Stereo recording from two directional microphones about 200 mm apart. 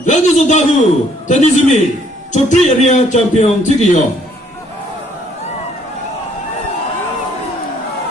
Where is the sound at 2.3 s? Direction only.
35° left (ahead or behind).